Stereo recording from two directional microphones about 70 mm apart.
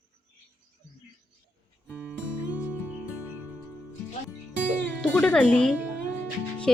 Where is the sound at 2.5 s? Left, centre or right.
Centre.